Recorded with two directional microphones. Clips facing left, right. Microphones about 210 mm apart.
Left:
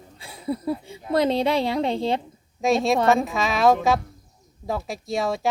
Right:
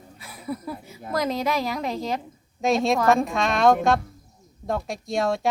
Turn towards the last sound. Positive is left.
turn(degrees=0)  # may be behind; listen again after turning